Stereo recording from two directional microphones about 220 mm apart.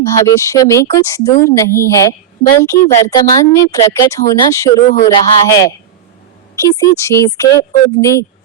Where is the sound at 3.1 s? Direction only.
15° left (ahead or behind).